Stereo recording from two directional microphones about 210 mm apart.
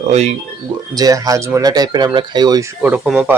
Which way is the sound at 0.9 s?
15° right (ahead or behind).